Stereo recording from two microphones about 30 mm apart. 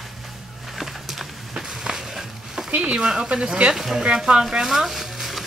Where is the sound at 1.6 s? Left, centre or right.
Centre.